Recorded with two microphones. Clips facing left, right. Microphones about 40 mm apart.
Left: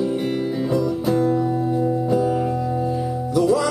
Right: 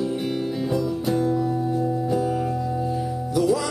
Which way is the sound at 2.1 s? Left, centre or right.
Centre.